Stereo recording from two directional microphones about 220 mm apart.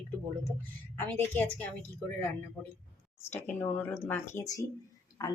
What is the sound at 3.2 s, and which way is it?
Speech, 10° left (ahead or behind).